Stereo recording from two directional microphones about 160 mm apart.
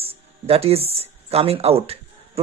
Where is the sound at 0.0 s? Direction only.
40° right (ahead or behind).